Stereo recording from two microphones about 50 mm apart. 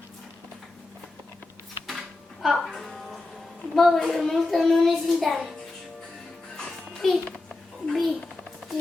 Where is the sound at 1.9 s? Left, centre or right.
Centre.